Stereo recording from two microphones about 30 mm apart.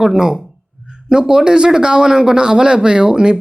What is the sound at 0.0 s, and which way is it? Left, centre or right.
Speech, right.